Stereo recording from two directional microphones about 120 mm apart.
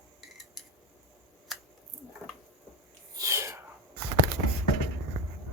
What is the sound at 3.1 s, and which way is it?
Sneeze, 25° right (ahead or behind).